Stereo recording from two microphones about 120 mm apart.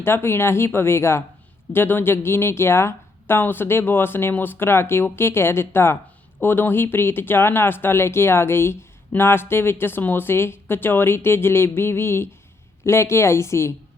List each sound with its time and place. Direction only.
0.0 s speech: 20° left (ahead or behind)